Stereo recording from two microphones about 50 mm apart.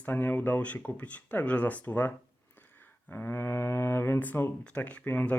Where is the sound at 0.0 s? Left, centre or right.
Left.